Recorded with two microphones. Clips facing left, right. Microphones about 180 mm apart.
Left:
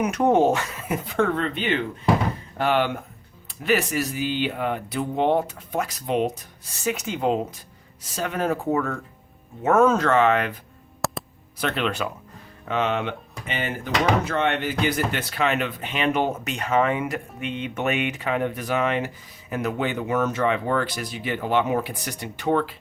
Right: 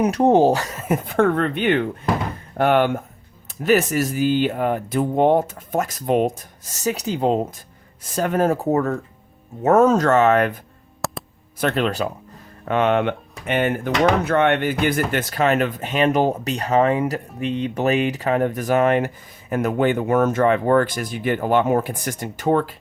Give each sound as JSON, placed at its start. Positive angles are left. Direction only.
{"t": 0.0, "sound": "speech", "side_deg": -35}
{"t": 8.0, "sound": "speech", "side_deg": -50}
{"t": 11.0, "sound": "a sound", "side_deg": 0}
{"t": 11.6, "sound": "speech", "side_deg": -40}
{"t": 12.6, "sound": "speech", "side_deg": -55}